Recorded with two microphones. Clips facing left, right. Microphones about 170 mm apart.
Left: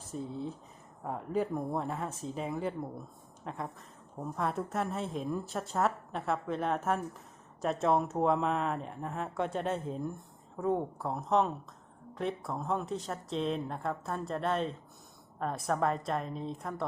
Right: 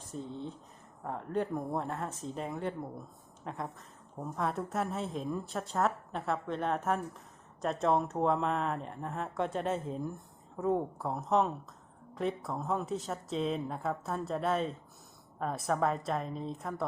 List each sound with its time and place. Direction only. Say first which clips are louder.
0.1 s a woman's voice: left 2 dB; 5° left (ahead or behind)